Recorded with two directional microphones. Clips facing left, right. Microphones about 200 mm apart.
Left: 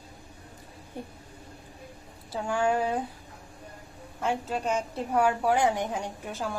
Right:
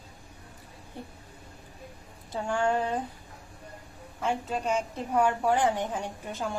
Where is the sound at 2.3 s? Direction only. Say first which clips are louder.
Left 1 dB; 5° left (ahead or behind).